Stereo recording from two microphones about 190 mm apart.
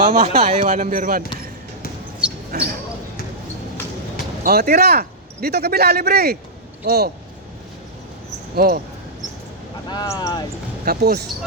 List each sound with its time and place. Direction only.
0.1 s speech: 40° right (ahead or behind)
2.5 s speech: 50° right (ahead or behind)
4.4 s speech: 55° right (ahead or behind)
8.5 s speech: 55° right (ahead or behind)
9.9 s speech: 20° left (ahead or behind)
10.8 s speech: 55° right (ahead or behind)